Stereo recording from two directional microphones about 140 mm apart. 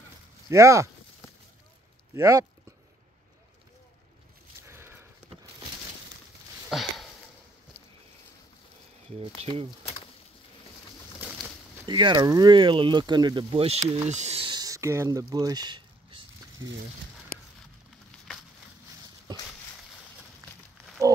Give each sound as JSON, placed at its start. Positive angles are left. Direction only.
{"t": 0.5, "sound": "speech", "side_deg": -20}
{"t": 2.1, "sound": "speech", "side_deg": -20}
{"t": 4.6, "sound": "sniff", "side_deg": -15}
{"t": 6.7, "sound": "a sound", "side_deg": 0}
{"t": 9.1, "sound": "speech", "side_deg": -45}
{"t": 11.9, "sound": "speech", "side_deg": -30}
{"t": 14.5, "sound": "a sound", "side_deg": -25}